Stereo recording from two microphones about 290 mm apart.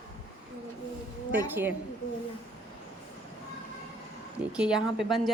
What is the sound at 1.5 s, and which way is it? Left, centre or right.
Speech, centre.